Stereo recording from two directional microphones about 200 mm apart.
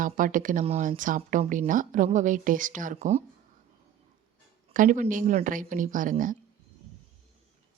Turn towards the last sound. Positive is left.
turn(degrees=-40)  # may be behind; listen again after turning